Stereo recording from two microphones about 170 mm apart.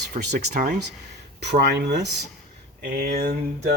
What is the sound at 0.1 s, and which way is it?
Speech, 45° right (ahead or behind).